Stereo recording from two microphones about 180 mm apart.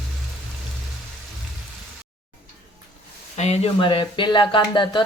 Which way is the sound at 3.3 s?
35° left (ahead or behind).